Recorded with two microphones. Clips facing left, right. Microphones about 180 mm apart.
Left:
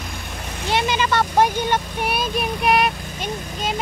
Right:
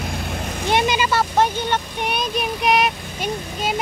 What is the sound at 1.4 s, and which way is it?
Vehicle, 10° left (ahead or behind).